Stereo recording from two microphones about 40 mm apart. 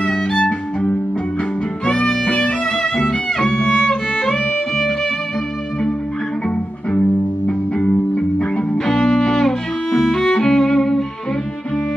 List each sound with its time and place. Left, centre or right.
1.9 s music: left
2.7 s music: centre
3.5 s violin: left
4.2 s music: centre
7.0 s music: left
8.8 s music: centre